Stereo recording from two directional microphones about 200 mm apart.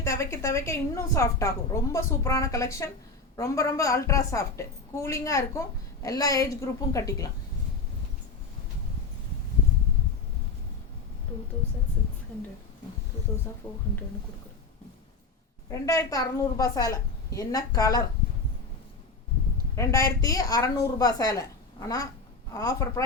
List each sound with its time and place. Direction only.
0.0 s a woman's voice: 15° left (ahead or behind)
15.7 s a woman's voice: 15° left (ahead or behind)
19.7 s a woman's voice: 15° left (ahead or behind)